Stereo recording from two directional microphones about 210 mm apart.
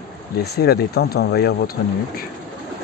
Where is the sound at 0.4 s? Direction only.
50° left (ahead or behind).